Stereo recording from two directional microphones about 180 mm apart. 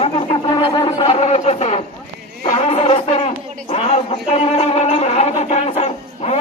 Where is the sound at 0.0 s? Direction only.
30° left (ahead or behind).